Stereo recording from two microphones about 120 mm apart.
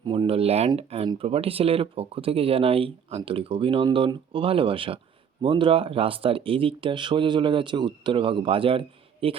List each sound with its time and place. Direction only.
0.0 s speech: 45° right (ahead or behind)